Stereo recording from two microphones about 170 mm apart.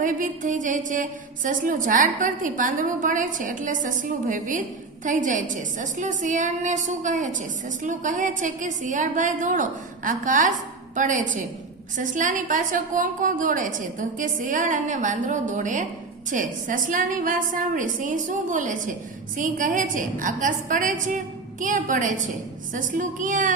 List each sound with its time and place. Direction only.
0.0 s a woman's voice: 50° right (ahead or behind)